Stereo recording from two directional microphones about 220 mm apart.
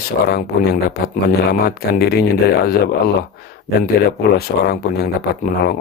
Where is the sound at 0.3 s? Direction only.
45° left (ahead or behind).